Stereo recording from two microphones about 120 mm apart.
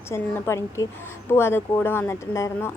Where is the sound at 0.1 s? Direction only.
20° left (ahead or behind).